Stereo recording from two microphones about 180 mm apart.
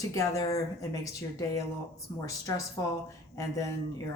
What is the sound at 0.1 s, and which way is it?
Speech, 20° left (ahead or behind).